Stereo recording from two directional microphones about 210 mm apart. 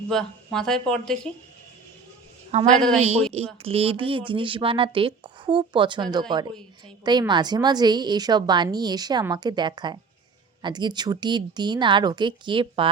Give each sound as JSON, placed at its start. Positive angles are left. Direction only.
{"t": 0.1, "sound": "speech", "side_deg": 0}
{"t": 2.5, "sound": "a woman's voice", "side_deg": -35}